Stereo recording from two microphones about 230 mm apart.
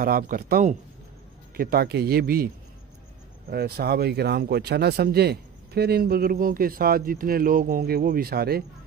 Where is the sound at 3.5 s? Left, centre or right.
Right.